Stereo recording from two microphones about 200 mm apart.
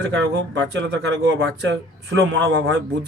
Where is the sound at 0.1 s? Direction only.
65° right (ahead or behind).